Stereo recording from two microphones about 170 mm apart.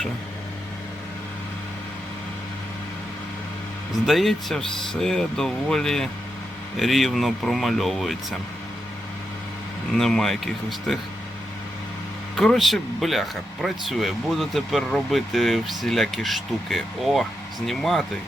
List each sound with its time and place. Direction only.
4.0 s speech: centre (ahead or behind)
9.9 s speech: centre (ahead or behind)
12.4 s speech: 5° left (ahead or behind)